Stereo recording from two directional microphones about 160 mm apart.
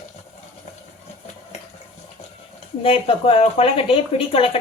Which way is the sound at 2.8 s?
35° left (ahead or behind).